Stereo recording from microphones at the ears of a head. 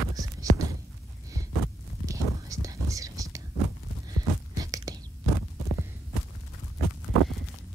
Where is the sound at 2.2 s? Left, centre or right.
Right.